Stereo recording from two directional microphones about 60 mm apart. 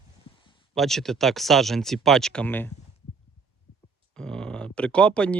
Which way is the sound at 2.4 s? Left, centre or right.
Left.